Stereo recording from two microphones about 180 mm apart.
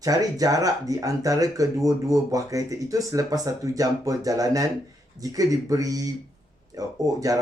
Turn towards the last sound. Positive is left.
turn(degrees=-20)  # may be behind; listen again after turning